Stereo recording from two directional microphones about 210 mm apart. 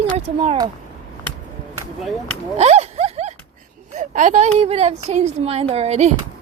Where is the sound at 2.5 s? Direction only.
30° right (ahead or behind).